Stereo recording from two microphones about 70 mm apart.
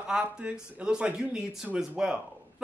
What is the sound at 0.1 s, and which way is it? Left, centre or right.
Speech, centre.